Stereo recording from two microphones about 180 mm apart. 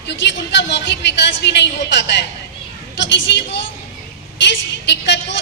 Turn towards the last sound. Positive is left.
turn(degrees=75)  # may be behind; listen again after turning